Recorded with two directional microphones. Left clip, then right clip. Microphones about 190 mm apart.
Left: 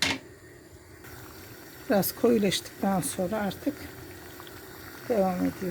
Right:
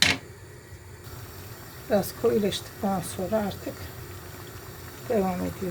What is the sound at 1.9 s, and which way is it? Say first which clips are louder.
Speech: even; 45° left (ahead or behind).